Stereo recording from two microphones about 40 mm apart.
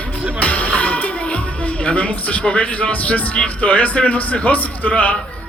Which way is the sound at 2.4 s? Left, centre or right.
Left.